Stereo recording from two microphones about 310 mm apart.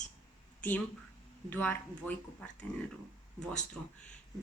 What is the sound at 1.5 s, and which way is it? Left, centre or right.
Speech, centre.